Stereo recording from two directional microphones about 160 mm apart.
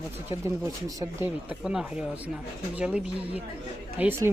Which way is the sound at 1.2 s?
5° right (ahead or behind).